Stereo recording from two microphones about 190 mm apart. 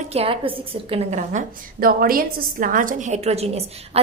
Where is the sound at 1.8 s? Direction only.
50° right (ahead or behind).